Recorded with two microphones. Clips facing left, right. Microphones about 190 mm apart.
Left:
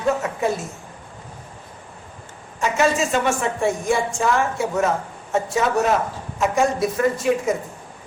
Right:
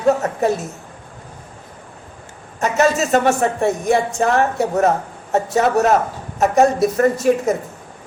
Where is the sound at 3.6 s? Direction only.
65° right (ahead or behind).